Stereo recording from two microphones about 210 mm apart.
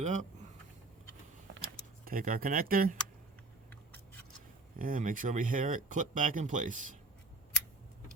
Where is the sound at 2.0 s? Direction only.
40° right (ahead or behind).